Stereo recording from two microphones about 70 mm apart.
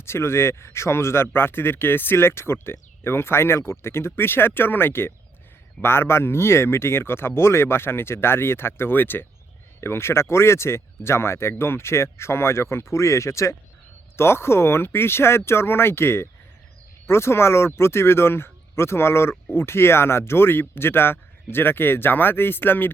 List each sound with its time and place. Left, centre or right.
0.0 s speech: left